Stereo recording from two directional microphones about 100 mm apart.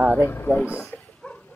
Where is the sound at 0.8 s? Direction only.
15° left (ahead or behind).